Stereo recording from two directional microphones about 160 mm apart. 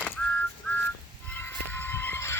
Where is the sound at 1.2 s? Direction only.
10° left (ahead or behind).